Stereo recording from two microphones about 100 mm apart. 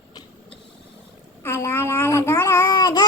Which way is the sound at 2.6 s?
40° left (ahead or behind).